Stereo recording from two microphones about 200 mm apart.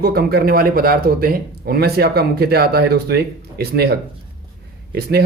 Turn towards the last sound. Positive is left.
turn(degrees=-50)  # may be behind; listen again after turning